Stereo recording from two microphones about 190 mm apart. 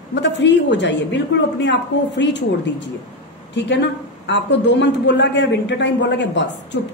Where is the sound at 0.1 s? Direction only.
70° left (ahead or behind).